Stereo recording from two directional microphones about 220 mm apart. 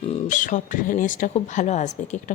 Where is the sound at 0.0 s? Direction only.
30° left (ahead or behind).